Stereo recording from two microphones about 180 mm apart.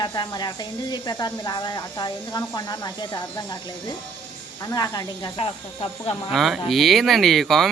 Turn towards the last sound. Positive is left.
turn(degrees=0)  # may be behind; listen again after turning